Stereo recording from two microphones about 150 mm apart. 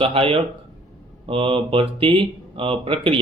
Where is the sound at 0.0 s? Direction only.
40° right (ahead or behind).